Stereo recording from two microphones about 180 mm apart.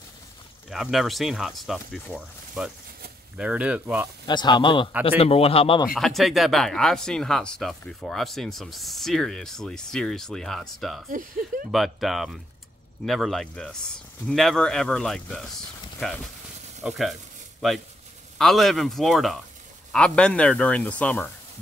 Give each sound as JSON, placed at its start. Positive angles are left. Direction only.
{"t": 0.7, "sound": "speech", "side_deg": 0}
{"t": 4.3, "sound": "speech", "side_deg": 25}
{"t": 5.9, "sound": "speech", "side_deg": 0}
{"t": 11.1, "sound": "speech", "side_deg": -50}
{"t": 11.7, "sound": "speech", "side_deg": 0}